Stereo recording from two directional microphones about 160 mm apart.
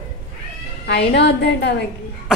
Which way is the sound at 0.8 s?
90° left.